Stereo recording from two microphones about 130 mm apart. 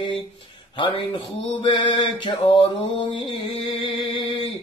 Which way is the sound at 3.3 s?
40° left (ahead or behind).